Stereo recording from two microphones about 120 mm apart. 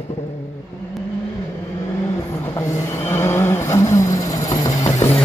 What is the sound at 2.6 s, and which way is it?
Vehicle, 25° left (ahead or behind).